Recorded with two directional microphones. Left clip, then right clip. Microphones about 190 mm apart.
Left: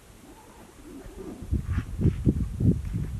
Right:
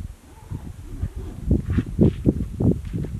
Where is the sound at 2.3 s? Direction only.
25° right (ahead or behind).